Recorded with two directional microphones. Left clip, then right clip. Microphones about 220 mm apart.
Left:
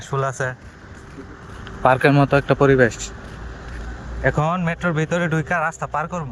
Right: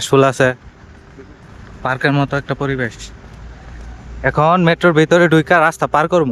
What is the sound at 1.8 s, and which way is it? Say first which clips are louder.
Speech: left 2 dB; 5° right (ahead or behind).